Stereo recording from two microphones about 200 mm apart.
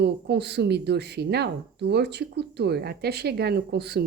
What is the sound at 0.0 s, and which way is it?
A woman's voice, 55° right (ahead or behind).